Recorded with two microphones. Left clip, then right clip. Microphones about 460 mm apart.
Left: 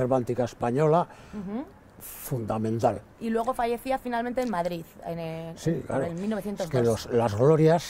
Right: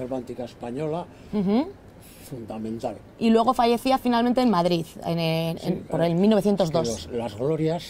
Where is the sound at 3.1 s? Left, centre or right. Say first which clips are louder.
Right 7 dB; right.